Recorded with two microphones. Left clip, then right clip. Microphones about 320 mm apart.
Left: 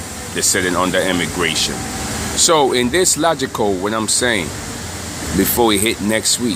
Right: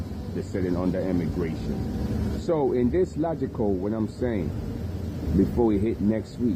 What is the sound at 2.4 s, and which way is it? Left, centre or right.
Speech, left.